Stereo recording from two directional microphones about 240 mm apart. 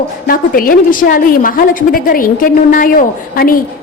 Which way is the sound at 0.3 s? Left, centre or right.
Left.